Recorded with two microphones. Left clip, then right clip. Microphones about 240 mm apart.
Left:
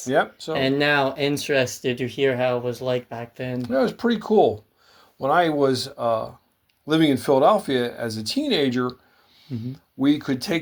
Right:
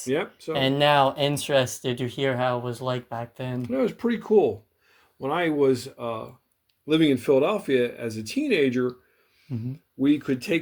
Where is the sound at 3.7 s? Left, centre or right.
Centre.